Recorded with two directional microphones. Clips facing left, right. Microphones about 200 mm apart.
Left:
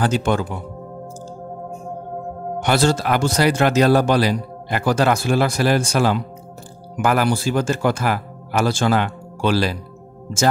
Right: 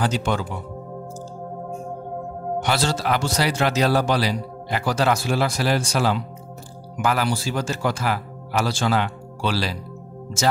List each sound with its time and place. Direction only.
0.0 s a man's voice: 50° left (ahead or behind)
2.6 s a man's voice: 50° left (ahead or behind)